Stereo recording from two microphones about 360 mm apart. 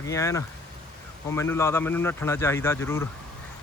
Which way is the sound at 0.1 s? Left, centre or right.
Centre.